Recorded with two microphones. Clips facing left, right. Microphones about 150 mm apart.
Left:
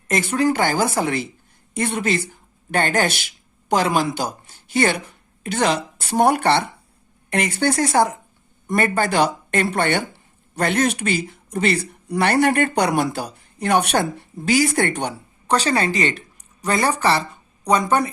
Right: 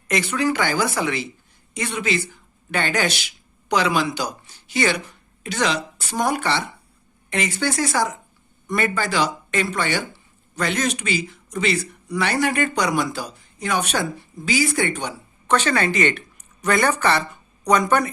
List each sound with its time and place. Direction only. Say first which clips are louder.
0.1 s a woman's voice: left 2 dB; 50° left (ahead or behind)
15.4 s a woman's voice: left 1 dB; 35° left (ahead or behind)